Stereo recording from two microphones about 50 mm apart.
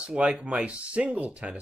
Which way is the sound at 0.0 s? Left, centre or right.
Right.